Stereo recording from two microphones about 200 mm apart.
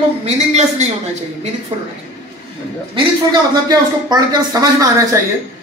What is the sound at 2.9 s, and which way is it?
A man's voice, 20° right (ahead or behind).